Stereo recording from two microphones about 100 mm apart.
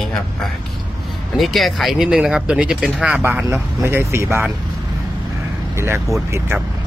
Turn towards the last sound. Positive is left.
turn(degrees=-25)  # may be behind; listen again after turning